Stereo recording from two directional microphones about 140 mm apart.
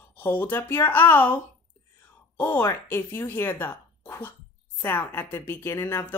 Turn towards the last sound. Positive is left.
turn(degrees=20)  # may be behind; listen again after turning